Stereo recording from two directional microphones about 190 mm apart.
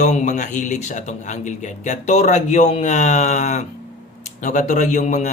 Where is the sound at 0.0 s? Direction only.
40° left (ahead or behind).